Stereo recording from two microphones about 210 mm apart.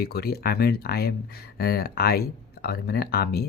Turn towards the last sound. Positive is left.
turn(degrees=50)  # may be behind; listen again after turning